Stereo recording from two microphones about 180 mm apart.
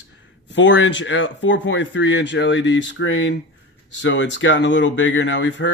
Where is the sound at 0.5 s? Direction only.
90° left.